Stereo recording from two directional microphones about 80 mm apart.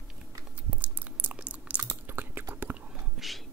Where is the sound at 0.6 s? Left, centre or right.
Centre.